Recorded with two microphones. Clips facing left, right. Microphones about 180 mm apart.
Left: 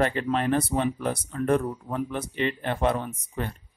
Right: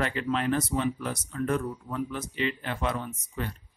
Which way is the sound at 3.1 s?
35° left (ahead or behind).